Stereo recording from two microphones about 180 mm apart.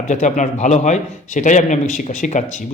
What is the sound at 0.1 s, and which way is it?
A man's voice, 40° left (ahead or behind).